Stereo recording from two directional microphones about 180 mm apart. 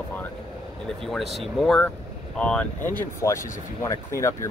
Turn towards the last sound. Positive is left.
turn(degrees=15)  # may be behind; listen again after turning